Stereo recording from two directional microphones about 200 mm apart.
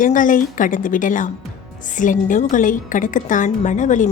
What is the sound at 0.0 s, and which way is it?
A woman's voice, 40° left (ahead or behind).